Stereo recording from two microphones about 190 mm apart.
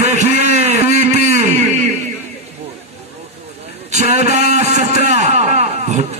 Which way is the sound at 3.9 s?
35° right (ahead or behind).